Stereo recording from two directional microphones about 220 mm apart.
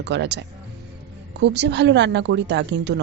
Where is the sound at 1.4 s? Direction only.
50° right (ahead or behind).